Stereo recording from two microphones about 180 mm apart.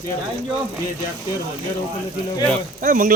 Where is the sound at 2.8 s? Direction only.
50° right (ahead or behind).